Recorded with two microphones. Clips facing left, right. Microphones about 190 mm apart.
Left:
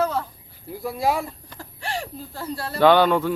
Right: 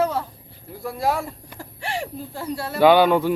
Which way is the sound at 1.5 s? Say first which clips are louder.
Right 2 dB; 25° right (ahead or behind).